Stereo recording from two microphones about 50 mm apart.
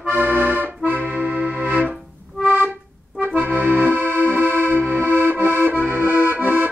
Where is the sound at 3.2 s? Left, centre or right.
Right.